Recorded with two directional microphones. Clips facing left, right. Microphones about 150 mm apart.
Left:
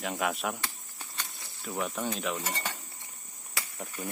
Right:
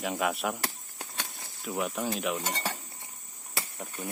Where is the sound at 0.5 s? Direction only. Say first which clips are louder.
Right 4 dB; 40° right (ahead or behind).